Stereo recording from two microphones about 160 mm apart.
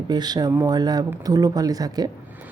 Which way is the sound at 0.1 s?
25° right (ahead or behind).